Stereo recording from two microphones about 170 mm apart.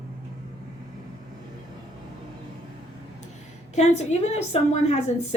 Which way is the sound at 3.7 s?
40° left (ahead or behind).